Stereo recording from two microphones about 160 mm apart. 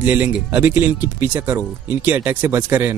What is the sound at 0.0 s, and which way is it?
Speech, 10° right (ahead or behind).